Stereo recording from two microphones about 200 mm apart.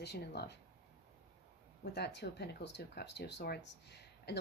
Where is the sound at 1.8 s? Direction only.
55° left (ahead or behind).